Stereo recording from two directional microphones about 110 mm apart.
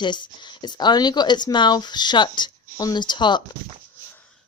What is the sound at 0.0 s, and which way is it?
Speech, 45° left (ahead or behind).